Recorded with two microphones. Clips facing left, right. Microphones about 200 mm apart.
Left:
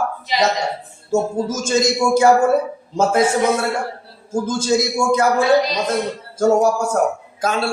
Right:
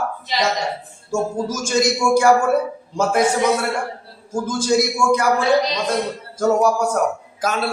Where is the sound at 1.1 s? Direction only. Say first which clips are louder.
Left 3 dB; 25° left (ahead or behind).